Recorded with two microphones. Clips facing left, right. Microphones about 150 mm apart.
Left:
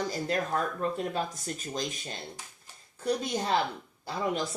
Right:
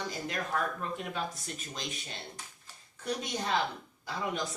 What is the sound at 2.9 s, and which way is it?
Speech, 35° left (ahead or behind).